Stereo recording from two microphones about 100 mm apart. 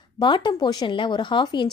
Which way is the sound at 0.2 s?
50° left (ahead or behind).